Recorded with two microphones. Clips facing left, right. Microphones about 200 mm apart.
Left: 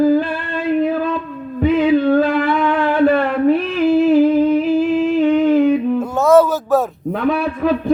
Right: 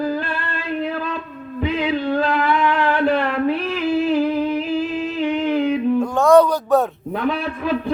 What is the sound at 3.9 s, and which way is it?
Humming, 50° left (ahead or behind).